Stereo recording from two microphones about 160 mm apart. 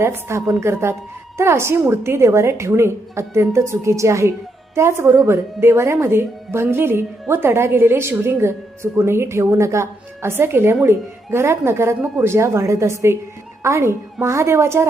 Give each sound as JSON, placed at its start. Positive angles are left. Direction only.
{"t": 0.0, "sound": "a woman's voice", "side_deg": -15}